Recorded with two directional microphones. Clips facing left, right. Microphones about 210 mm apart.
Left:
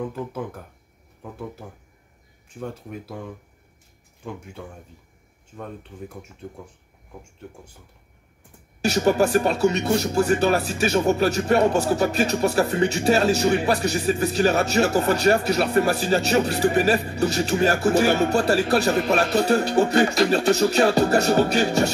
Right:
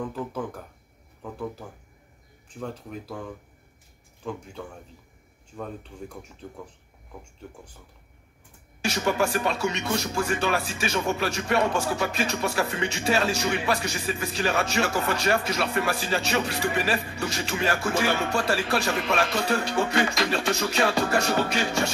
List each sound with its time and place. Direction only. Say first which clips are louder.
2.6 s speech: left 2 dB; 5° left (ahead or behind)
4.2 s speech: right 1 dB; 10° left (ahead or behind)
8.8 s speech: left 6 dB; 40° left (ahead or behind)